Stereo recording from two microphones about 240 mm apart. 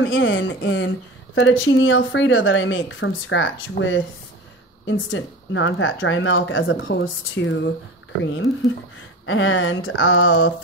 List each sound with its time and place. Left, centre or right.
0.0 s speech: left